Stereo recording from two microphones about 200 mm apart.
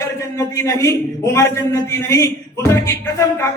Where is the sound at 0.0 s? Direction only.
15° left (ahead or behind).